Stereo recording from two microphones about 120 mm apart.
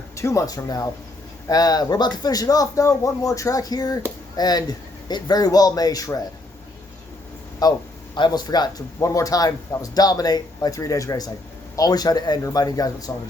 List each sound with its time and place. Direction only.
0.2 s speech: 25° left (ahead or behind)
7.6 s speech: 30° left (ahead or behind)